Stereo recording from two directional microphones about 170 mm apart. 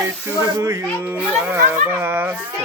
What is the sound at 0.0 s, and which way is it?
Speech, 15° right (ahead or behind).